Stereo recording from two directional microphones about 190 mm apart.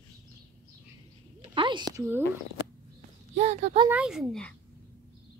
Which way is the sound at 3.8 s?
5° right (ahead or behind).